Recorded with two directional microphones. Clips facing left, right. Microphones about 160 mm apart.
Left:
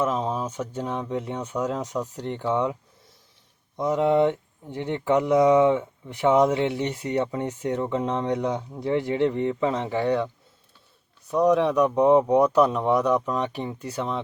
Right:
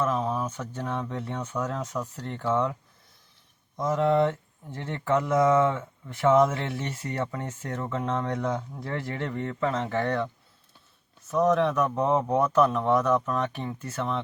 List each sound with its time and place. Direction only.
0.0 s speech: 20° left (ahead or behind)
3.8 s speech: 15° left (ahead or behind)
11.3 s speech: 15° left (ahead or behind)